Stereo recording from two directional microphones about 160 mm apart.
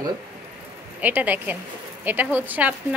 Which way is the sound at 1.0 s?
10° right (ahead or behind).